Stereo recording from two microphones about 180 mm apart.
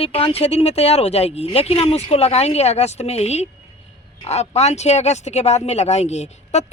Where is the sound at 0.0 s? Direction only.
30° left (ahead or behind).